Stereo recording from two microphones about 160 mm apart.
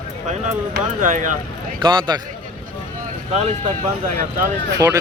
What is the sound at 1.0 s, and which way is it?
Speech, 55° right (ahead or behind).